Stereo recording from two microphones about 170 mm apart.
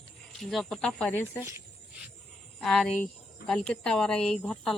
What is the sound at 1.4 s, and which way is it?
Speech, 15° right (ahead or behind).